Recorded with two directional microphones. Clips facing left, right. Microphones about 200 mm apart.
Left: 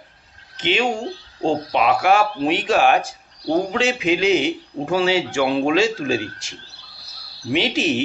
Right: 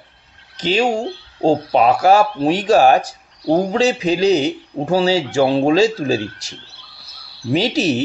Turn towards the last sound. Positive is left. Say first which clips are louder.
# right 3 dB
turn(degrees=-40)  # may be behind; listen again after turning